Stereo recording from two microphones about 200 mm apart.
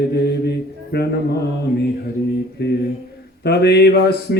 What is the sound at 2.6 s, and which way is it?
Mantra, 55° left (ahead or behind).